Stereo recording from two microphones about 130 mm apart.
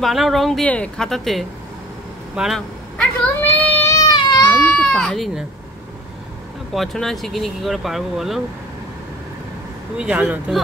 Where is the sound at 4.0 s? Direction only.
30° left (ahead or behind).